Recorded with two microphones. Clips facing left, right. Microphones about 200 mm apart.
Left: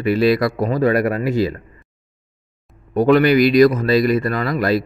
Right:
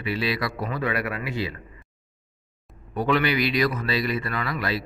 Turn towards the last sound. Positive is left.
turn(degrees=45)  # may be behind; listen again after turning